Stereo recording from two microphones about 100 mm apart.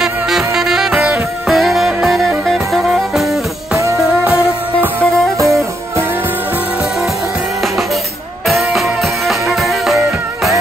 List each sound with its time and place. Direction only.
0.0 s music: 5° right (ahead or behind)
3.7 s music: 30° right (ahead or behind)
5.4 s music: 30° right (ahead or behind)
8.5 s music: centre (ahead or behind)